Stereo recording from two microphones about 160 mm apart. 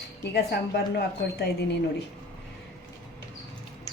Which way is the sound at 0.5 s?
90° left.